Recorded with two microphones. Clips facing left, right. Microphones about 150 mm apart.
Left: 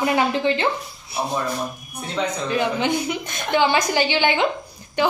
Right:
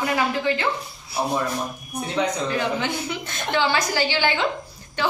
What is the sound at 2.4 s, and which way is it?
A woman's voice, 20° left (ahead or behind).